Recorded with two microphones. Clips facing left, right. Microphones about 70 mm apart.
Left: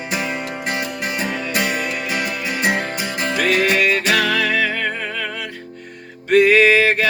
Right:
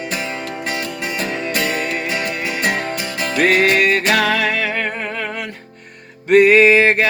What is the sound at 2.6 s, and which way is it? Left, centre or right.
Music, centre.